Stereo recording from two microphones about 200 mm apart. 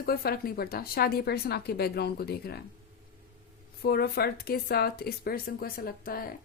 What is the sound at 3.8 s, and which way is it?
A woman's voice, 50° left (ahead or behind).